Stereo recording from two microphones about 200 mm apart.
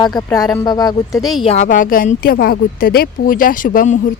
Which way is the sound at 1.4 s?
35° left (ahead or behind).